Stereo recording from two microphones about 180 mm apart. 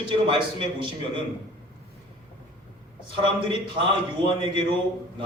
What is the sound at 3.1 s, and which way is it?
Speech, 25° right (ahead or behind).